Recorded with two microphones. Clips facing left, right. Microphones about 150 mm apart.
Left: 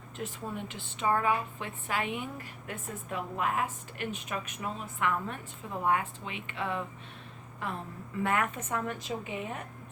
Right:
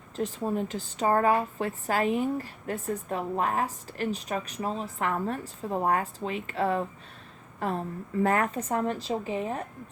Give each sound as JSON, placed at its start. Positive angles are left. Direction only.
{"t": 0.2, "sound": "a woman's voice", "side_deg": -40}